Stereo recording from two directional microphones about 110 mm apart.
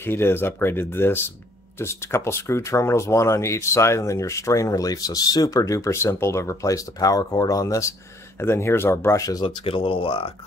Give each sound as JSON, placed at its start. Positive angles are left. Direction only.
{"t": 0.0, "sound": "speech", "side_deg": 20}
{"t": 9.4, "sound": "speech", "side_deg": 50}